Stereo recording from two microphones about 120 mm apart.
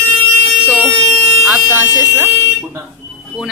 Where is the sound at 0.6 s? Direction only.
10° right (ahead or behind).